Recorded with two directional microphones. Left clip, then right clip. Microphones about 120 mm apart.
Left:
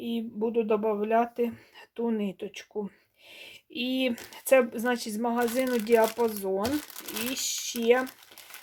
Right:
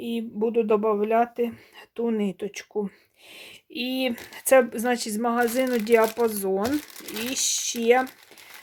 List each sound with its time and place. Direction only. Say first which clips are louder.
0.0 s speech: right 4 dB; 30° right (ahead or behind)
3.3 s speech: right 2 dB; 25° right (ahead or behind)